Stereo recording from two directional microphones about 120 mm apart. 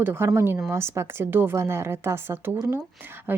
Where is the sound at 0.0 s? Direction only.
20° right (ahead or behind).